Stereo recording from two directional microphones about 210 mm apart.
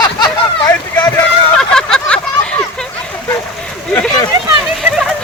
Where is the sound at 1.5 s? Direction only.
5° left (ahead or behind).